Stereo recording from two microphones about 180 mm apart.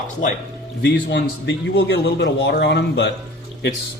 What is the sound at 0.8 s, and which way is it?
A man's voice, 75° left (ahead or behind).